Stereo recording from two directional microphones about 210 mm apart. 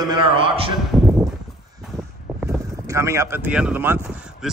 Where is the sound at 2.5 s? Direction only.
15° right (ahead or behind).